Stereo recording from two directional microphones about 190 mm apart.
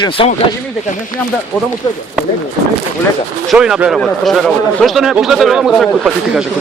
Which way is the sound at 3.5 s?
5° right (ahead or behind).